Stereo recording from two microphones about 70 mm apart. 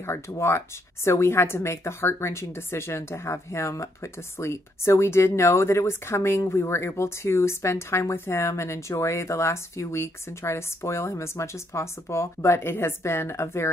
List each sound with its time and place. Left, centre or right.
0.4 s speech: left